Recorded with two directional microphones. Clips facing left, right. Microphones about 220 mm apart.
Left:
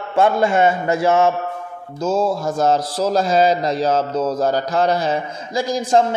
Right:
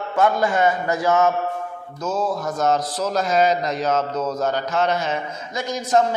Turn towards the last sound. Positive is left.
turn(degrees=30)  # may be behind; listen again after turning